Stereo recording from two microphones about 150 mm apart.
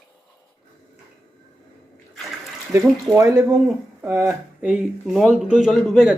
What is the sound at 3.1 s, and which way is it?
Speech, 20° right (ahead or behind).